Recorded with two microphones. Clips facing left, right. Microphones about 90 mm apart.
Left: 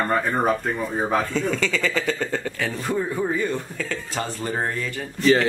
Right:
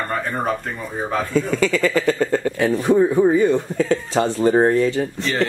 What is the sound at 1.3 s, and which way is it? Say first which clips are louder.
Speech: right 5 dB; 10° right (ahead or behind).